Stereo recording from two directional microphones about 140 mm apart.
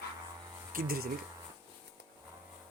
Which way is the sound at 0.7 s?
90° right.